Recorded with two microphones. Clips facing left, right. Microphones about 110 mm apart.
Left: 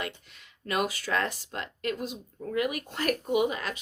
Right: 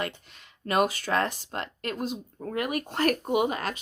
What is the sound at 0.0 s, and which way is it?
Speech, 40° right (ahead or behind).